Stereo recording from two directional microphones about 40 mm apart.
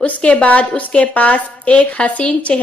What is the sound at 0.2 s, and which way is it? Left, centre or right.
Speech, left.